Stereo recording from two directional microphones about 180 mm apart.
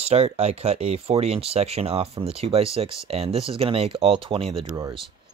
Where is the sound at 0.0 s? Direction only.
35° right (ahead or behind).